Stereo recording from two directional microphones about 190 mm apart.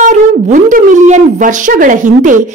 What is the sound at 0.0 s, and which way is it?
A woman's voice, 40° right (ahead or behind).